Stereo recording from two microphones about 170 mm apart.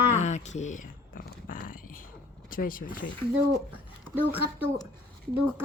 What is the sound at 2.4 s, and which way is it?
Speech, 55° left (ahead or behind).